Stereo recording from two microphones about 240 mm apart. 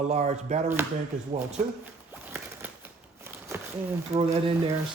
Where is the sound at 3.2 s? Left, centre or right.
Centre.